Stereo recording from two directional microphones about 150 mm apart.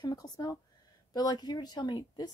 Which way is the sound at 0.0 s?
25° left (ahead or behind).